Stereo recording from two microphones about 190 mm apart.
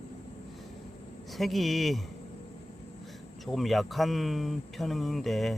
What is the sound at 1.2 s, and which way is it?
Speech, centre (ahead or behind).